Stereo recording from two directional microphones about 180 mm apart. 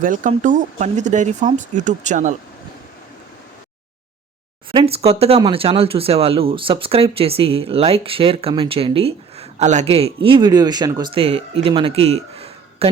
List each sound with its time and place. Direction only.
0.0 s speech: 45° right (ahead or behind)
4.7 s speech: 30° right (ahead or behind)